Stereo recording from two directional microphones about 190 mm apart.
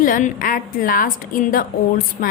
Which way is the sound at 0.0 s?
45° left (ahead or behind).